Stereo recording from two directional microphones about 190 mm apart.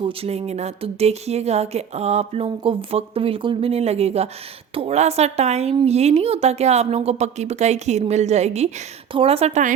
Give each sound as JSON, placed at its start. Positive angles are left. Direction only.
{"t": 0.0, "sound": "speech", "side_deg": -30}